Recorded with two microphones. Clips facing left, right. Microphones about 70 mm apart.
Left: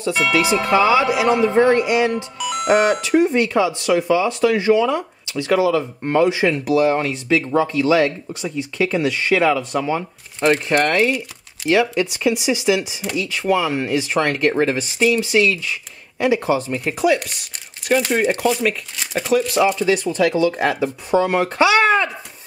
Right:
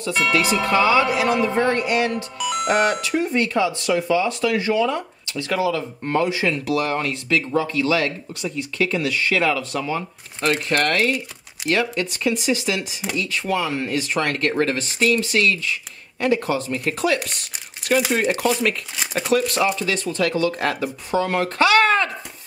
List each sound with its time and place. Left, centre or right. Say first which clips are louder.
0.3 s speech: left 3 dB; centre
2.3 s speech: left 3 dB; centre
3.0 s speech: left 5 dB; centre